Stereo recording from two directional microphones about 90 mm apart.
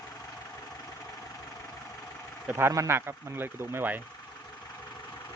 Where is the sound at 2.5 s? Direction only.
25° right (ahead or behind).